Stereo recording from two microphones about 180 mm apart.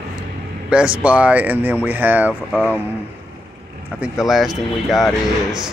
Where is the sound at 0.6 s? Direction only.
5° right (ahead or behind).